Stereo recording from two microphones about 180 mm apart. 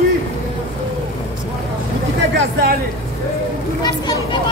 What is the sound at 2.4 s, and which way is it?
Speech, 60° right (ahead or behind).